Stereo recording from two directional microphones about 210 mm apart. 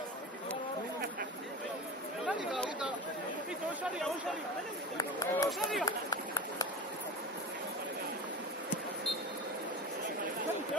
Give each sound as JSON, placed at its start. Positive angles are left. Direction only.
{"t": 2.2, "sound": "chatter", "side_deg": -5}
{"t": 4.9, "sound": "speech", "side_deg": 15}
{"t": 5.9, "sound": "run", "side_deg": 15}